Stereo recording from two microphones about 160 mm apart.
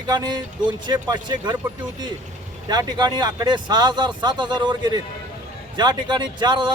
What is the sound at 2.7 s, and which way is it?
Speech, 25° right (ahead or behind).